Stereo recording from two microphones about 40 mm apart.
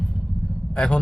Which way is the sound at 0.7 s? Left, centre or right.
Left.